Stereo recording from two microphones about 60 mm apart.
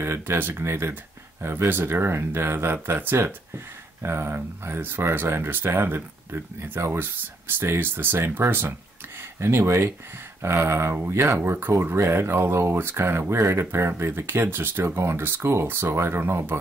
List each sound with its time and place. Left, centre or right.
0.0 s speech: right